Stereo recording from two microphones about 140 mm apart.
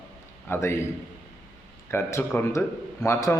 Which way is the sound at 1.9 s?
15° left (ahead or behind).